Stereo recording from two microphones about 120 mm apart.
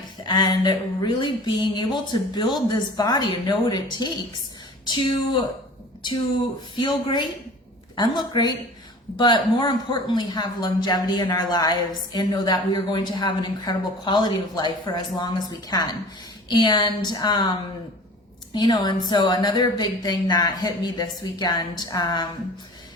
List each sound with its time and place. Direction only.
0.3 s a man's voice: 35° left (ahead or behind)
6.7 s a man's voice: 40° left (ahead or behind)